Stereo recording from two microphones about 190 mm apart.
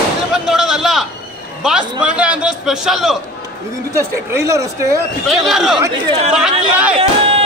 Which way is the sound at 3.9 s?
15° right (ahead or behind).